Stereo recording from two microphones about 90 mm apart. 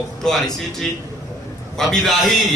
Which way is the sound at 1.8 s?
Centre (ahead or behind).